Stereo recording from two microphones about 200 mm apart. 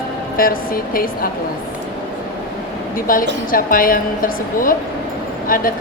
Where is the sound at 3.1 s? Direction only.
45° left (ahead or behind).